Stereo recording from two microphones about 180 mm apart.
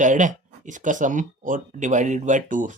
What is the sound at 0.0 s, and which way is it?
Speech, 45° right (ahead or behind).